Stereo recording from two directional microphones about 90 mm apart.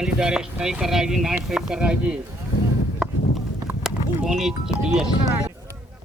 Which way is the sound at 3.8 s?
5° right (ahead or behind).